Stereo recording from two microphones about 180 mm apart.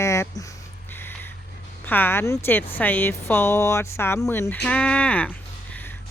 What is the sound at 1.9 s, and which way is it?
Speech, 10° left (ahead or behind).